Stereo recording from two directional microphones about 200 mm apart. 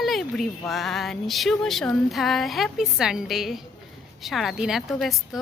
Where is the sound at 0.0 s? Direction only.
Centre (ahead or behind).